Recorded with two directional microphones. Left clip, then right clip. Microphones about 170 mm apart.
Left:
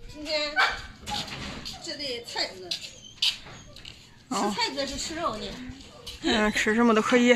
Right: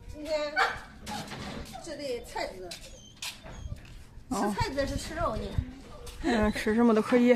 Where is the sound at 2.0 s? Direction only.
45° right (ahead or behind).